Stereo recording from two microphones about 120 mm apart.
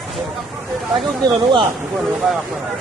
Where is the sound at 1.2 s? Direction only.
45° right (ahead or behind).